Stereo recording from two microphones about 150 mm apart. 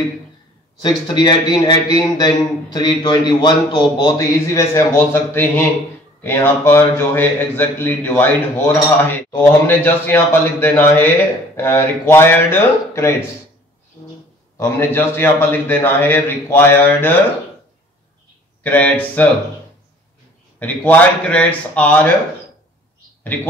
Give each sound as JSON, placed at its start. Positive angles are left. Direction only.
{"t": 0.8, "sound": "a man's voice", "side_deg": 30}
{"t": 14.6, "sound": "speech", "side_deg": 15}
{"t": 18.6, "sound": "speech", "side_deg": 10}
{"t": 20.5, "sound": "speech", "side_deg": 10}